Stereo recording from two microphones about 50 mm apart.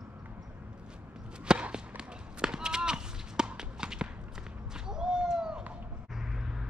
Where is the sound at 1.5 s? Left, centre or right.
Centre.